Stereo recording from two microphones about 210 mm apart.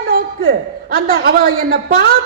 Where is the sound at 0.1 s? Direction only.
45° right (ahead or behind).